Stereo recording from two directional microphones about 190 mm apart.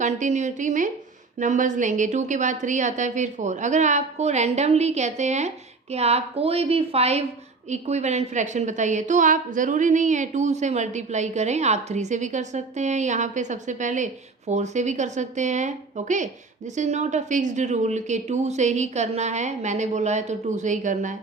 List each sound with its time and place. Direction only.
0.0 s a woman's voice: 40° right (ahead or behind)